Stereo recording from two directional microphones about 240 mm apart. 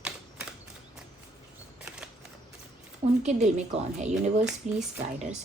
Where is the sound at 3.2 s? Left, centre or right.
Right.